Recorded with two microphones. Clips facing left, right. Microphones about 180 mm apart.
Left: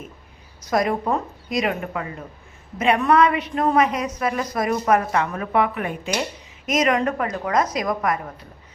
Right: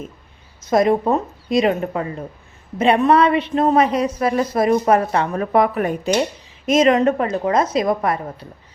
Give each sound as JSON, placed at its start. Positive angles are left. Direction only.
{"t": 0.6, "sound": "a woman's voice", "side_deg": -25}
{"t": 6.7, "sound": "a woman's voice", "side_deg": -30}